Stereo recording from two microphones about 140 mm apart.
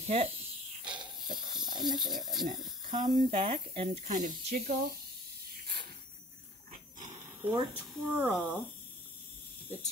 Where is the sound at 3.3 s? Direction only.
45° right (ahead or behind).